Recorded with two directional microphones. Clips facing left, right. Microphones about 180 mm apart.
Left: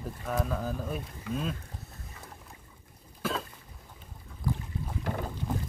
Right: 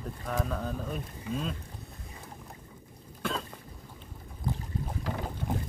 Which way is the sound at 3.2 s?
5° left (ahead or behind).